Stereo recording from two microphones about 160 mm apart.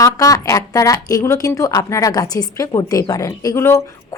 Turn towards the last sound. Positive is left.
turn(degrees=20)  # may be behind; listen again after turning